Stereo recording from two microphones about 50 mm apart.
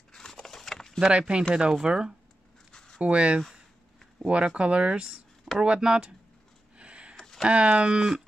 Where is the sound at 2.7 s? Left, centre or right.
Centre.